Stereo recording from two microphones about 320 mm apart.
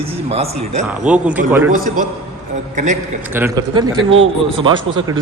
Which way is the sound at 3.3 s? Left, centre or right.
Centre.